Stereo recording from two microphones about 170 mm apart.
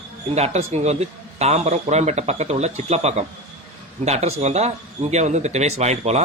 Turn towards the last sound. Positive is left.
turn(degrees=-40)  # may be behind; listen again after turning